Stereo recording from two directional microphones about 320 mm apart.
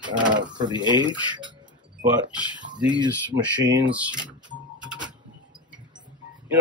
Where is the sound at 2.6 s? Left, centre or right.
Right.